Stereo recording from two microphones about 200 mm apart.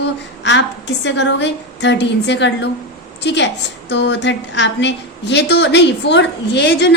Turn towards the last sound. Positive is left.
turn(degrees=60)  # may be behind; listen again after turning